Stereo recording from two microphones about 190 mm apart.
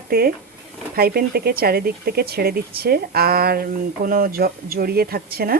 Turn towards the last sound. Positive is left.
turn(degrees=-55)  # may be behind; listen again after turning